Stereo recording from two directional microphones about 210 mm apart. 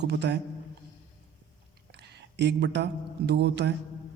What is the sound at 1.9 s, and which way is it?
Speech, 55° right (ahead or behind).